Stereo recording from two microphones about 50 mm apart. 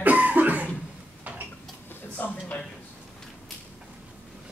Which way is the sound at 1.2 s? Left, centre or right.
Right.